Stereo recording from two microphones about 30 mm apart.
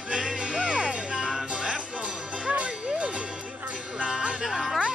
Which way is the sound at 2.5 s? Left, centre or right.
Right.